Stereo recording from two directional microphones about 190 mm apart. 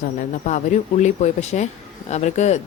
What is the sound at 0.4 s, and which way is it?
Speech, 40° left (ahead or behind).